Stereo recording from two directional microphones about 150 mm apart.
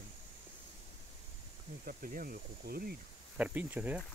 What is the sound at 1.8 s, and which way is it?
Speech, 70° right (ahead or behind).